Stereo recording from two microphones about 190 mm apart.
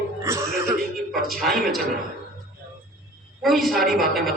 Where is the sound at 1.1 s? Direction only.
Centre (ahead or behind).